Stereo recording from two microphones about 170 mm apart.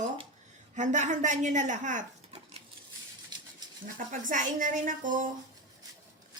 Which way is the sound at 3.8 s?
50° right (ahead or behind).